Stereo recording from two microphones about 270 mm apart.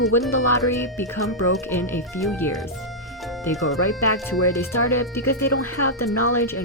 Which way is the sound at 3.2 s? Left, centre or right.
Centre.